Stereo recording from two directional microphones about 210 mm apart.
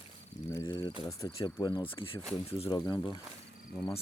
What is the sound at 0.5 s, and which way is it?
Speech, 20° left (ahead or behind).